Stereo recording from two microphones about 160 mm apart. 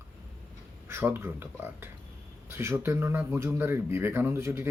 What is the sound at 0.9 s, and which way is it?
Speech, 15° right (ahead or behind).